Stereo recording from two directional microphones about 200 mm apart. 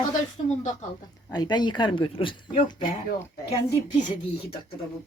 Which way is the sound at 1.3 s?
20° left (ahead or behind).